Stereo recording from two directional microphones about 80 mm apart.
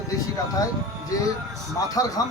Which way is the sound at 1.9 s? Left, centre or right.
Left.